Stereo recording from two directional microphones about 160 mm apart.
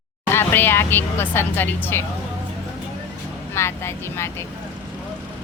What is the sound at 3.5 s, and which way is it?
Speech, 15° left (ahead or behind).